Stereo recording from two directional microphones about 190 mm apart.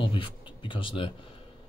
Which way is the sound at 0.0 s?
25° left (ahead or behind).